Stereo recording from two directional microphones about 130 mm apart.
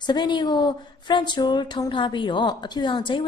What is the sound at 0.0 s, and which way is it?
A woman's voice, 35° left (ahead or behind).